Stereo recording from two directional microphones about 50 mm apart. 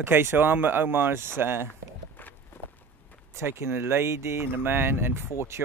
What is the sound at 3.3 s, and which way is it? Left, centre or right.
Speech, right.